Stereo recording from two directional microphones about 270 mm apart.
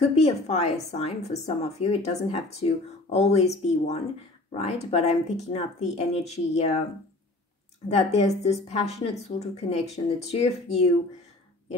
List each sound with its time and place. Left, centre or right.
0.0 s a woman's voice: left
7.9 s a woman's voice: left